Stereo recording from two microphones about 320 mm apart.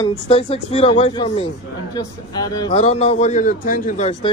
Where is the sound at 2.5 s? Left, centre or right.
Centre.